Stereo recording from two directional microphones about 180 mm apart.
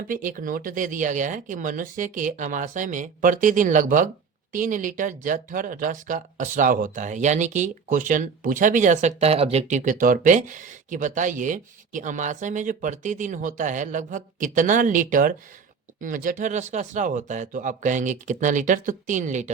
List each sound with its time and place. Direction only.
0.1 s speech: 50° right (ahead or behind)